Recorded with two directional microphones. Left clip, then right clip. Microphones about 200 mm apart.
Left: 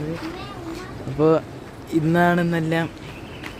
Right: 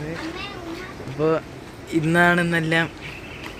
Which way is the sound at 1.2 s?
30° left (ahead or behind).